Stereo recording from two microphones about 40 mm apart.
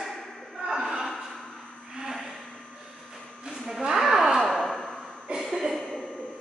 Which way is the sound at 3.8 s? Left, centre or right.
Centre.